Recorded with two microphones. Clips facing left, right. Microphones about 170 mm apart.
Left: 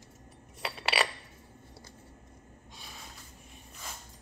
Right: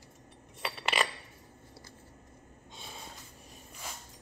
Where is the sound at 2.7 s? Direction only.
25° right (ahead or behind).